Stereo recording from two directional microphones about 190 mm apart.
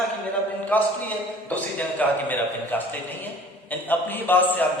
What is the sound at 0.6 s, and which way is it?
A man's voice, 10° left (ahead or behind).